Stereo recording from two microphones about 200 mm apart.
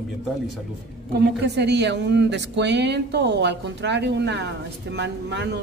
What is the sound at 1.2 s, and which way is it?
A man's voice, 60° right (ahead or behind).